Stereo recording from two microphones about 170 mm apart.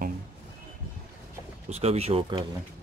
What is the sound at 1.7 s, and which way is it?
Speech, 40° right (ahead or behind).